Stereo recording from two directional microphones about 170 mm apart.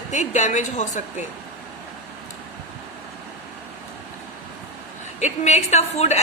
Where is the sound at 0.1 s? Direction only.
45° left (ahead or behind).